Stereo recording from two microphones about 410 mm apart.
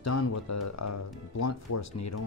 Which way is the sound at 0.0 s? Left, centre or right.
Left.